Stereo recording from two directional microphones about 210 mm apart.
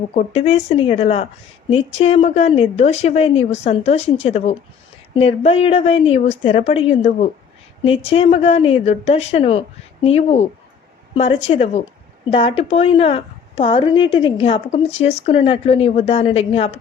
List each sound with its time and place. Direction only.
0.1 s speech: 30° left (ahead or behind)